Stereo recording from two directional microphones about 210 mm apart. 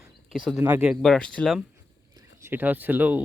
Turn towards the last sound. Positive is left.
turn(degrees=-5)  # may be behind; listen again after turning